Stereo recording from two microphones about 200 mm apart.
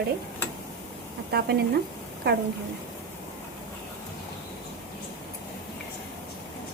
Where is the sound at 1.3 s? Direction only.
55° right (ahead or behind).